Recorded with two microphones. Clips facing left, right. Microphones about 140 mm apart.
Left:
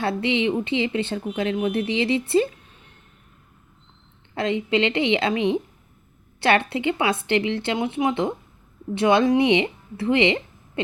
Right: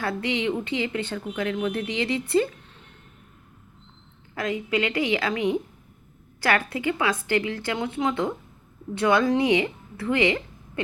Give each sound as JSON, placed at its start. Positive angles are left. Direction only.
{"t": 0.0, "sound": "speech", "side_deg": 25}
{"t": 4.4, "sound": "speech", "side_deg": 25}